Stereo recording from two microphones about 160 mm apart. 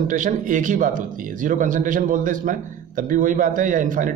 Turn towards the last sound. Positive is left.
turn(degrees=-55)  # may be behind; listen again after turning